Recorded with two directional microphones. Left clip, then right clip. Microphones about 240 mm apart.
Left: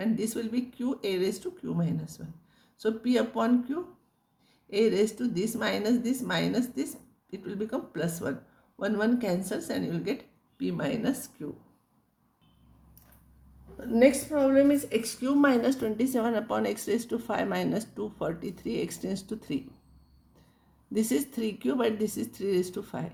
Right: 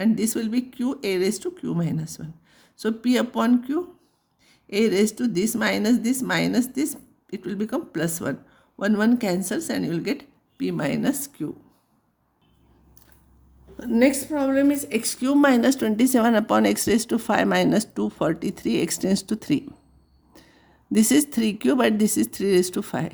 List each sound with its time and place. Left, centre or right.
0.0 s a woman's voice: right
13.7 s a woman's voice: right
20.9 s a woman's voice: right